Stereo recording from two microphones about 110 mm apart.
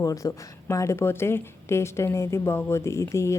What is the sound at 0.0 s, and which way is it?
A woman's voice, 30° left (ahead or behind).